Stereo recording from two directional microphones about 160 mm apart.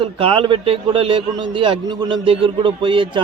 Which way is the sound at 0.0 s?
35° right (ahead or behind).